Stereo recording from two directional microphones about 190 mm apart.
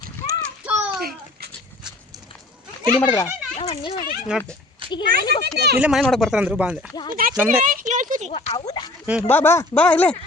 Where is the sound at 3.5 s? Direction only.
30° left (ahead or behind).